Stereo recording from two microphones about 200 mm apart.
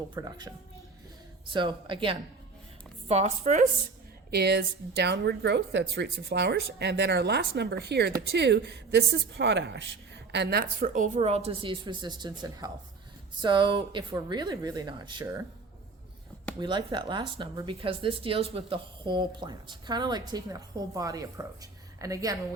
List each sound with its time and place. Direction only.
0.1 s a woman's voice: 20° right (ahead or behind)
4.3 s a woman's voice: 55° right (ahead or behind); by 15.4 s 20° right (ahead or behind)
16.6 s speech: 25° right (ahead or behind)